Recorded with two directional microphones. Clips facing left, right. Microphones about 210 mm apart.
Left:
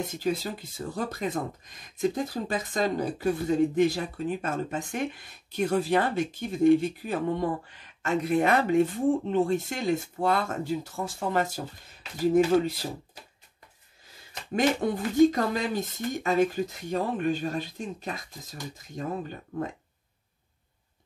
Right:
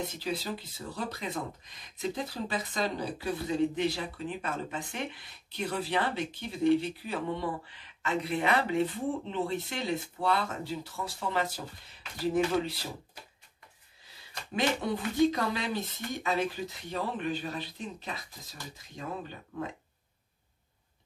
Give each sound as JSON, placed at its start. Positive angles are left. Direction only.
{"t": 0.2, "sound": "speech", "side_deg": 50}
{"t": 14.5, "sound": "speech", "side_deg": 45}